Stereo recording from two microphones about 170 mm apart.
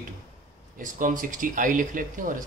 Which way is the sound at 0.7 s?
50° right (ahead or behind).